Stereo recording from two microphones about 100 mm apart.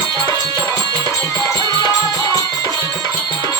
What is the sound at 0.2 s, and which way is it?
Music, 35° left (ahead or behind).